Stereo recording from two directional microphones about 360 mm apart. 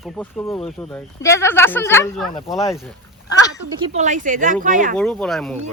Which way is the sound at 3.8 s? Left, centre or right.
Centre.